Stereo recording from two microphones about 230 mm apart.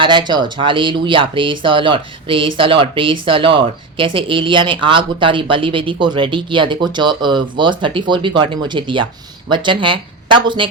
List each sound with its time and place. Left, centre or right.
0.0 s speech: centre